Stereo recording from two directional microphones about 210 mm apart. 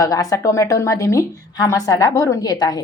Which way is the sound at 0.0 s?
15° left (ahead or behind).